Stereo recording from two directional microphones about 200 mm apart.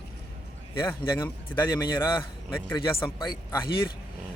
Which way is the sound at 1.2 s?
10° left (ahead or behind).